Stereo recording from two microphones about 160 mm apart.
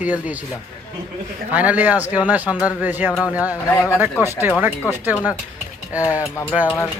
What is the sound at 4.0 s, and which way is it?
A man's voice, 10° right (ahead or behind).